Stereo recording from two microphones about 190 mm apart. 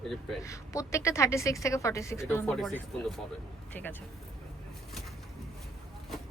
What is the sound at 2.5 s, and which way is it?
A woman's voice, centre (ahead or behind).